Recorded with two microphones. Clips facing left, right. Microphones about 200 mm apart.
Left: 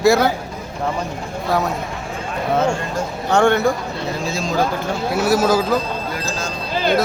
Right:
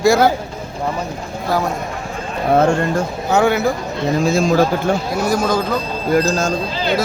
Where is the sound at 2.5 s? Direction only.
55° right (ahead or behind).